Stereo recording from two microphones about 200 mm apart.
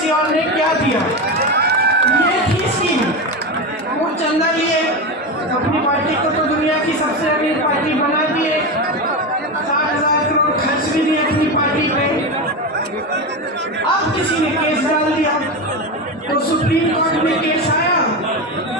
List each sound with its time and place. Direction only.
1.4 s run: 55° right (ahead or behind)